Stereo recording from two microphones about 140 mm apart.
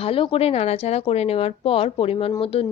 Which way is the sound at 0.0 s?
40° left (ahead or behind).